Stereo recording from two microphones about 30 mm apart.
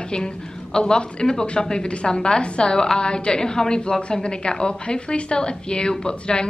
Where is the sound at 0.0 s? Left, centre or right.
Left.